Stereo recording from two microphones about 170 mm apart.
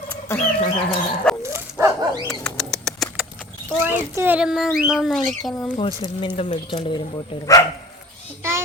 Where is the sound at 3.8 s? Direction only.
10° right (ahead or behind).